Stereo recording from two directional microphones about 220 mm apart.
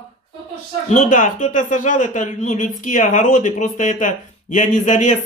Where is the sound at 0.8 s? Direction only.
35° left (ahead or behind).